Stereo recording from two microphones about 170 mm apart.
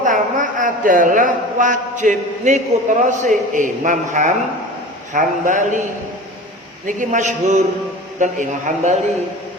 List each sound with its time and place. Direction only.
0.0 s a man's voice: 50° right (ahead or behind)
6.8 s a man's voice: 50° right (ahead or behind)